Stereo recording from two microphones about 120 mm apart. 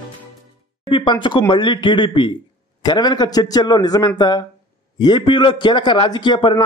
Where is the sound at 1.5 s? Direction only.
45° left (ahead or behind).